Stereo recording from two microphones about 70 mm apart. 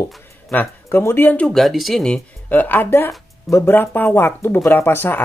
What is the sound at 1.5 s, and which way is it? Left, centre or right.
Speech, centre.